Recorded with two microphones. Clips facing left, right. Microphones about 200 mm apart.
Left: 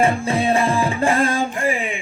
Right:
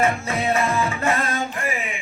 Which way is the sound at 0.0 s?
30° left (ahead or behind).